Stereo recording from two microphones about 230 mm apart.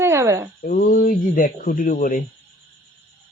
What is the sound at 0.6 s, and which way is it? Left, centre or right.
Speech, left.